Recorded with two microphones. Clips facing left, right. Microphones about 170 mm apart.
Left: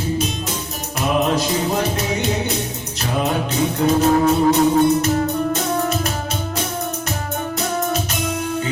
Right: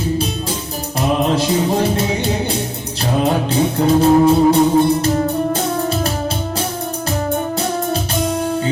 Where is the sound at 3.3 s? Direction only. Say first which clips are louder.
Right 4 dB; 30° right (ahead or behind).